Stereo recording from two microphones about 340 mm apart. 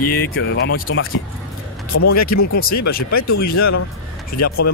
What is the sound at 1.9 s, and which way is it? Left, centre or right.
Speech, left.